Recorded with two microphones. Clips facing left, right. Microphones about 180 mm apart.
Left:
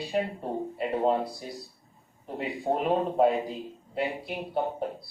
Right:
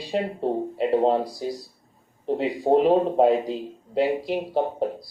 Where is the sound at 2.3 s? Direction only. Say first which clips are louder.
Right 7 dB; 90° right.